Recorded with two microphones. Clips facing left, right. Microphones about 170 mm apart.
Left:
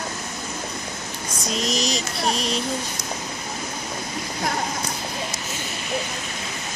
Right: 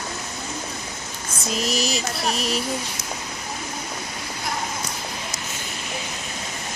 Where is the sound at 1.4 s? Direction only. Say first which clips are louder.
Even; 5° right (ahead or behind).